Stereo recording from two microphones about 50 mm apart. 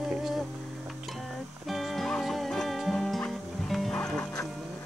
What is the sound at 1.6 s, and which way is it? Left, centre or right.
Music, centre.